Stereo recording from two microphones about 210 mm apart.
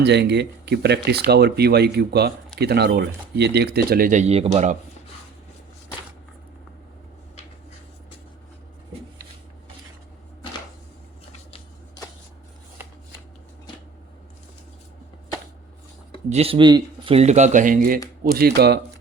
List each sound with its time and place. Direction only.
0.0 s speech: 55° right (ahead or behind); by 4.8 s 30° right (ahead or behind)
16.3 s speech: 25° right (ahead or behind); by 18.8 s 50° right (ahead or behind)